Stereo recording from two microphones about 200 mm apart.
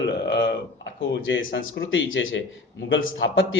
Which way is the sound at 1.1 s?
70° left (ahead or behind).